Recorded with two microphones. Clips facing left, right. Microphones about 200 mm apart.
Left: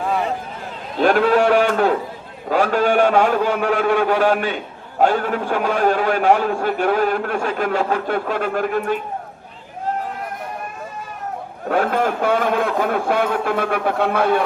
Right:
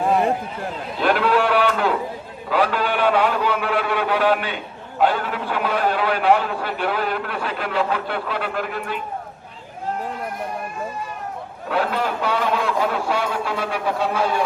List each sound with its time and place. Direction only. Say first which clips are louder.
0.9 s a sound: left 4 dB; 45° left (ahead or behind)
2.5 s a man's voice: left 4 dB; 45° left (ahead or behind)
11.7 s a man's voice: left 4 dB; 50° left (ahead or behind)